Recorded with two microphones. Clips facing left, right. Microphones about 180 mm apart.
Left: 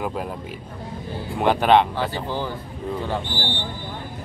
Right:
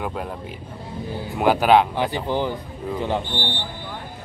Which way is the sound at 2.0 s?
15° right (ahead or behind).